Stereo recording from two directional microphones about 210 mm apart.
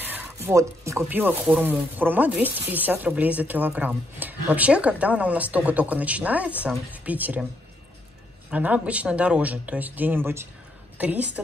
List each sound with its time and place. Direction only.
0.0 s speech: 10° right (ahead or behind)
8.5 s speech: 5° right (ahead or behind)